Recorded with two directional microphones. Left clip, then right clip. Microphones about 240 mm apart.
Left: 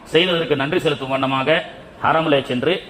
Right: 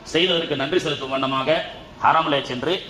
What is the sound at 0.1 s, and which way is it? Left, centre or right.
A man's voice, left.